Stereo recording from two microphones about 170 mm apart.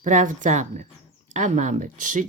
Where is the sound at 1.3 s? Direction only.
45° right (ahead or behind).